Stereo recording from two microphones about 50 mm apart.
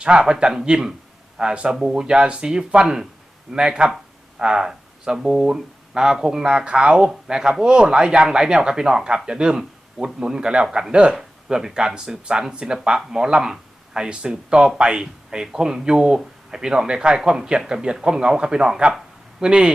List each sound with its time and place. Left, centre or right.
0.0 s speech: centre